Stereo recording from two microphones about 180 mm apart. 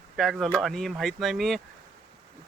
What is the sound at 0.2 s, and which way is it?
Speech, centre (ahead or behind).